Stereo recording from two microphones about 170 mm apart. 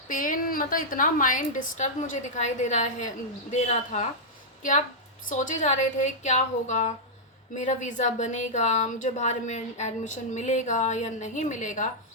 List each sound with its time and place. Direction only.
0.1 s speech: 50° left (ahead or behind)
5.3 s speech: 45° left (ahead or behind)